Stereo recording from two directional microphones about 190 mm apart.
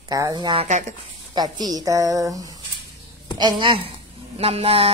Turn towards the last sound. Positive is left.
turn(degrees=-30)  # may be behind; listen again after turning